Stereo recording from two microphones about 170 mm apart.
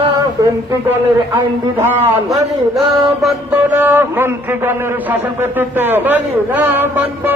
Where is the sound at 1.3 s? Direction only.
15° right (ahead or behind).